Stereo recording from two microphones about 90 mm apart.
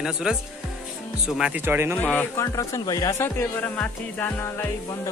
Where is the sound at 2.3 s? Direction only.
35° left (ahead or behind).